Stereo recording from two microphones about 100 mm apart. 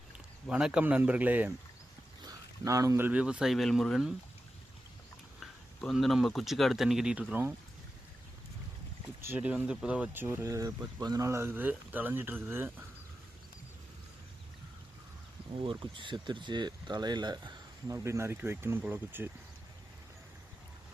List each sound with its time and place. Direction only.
0.5 s speech: 10° right (ahead or behind)
2.2 s a sound: 35° right (ahead or behind)
3.1 s speech: 10° right (ahead or behind)
5.4 s speech: centre (ahead or behind); by 7.5 s 15° right (ahead or behind)
9.2 s speech: 15° right (ahead or behind); by 11.3 s 40° right (ahead or behind)
11.3 s speech: 25° right (ahead or behind)
15.6 s speech: 50° right (ahead or behind)
17.8 s speech: 30° right (ahead or behind)